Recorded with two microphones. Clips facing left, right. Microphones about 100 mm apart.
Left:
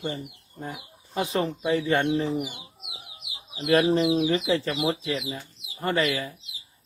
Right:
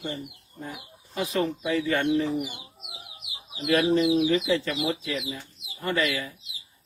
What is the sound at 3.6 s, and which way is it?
Speech, 35° left (ahead or behind).